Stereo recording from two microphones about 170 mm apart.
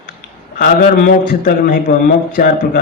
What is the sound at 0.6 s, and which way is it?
Mantra, 60° left (ahead or behind).